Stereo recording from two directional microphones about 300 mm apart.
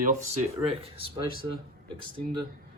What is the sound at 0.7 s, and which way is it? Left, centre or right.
Speech, centre.